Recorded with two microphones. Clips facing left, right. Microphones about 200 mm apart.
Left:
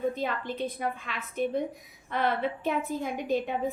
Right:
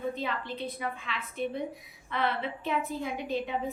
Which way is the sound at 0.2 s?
45° left (ahead or behind).